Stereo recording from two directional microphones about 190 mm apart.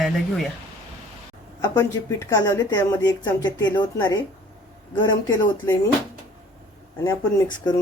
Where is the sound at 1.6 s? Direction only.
20° left (ahead or behind).